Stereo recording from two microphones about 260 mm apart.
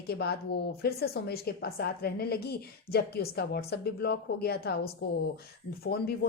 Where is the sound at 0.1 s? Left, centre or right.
Left.